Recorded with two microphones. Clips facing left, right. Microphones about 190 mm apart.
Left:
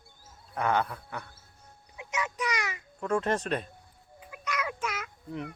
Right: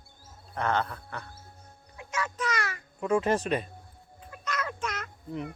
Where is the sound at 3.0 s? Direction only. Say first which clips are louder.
Right 3 dB; 5° right (ahead or behind).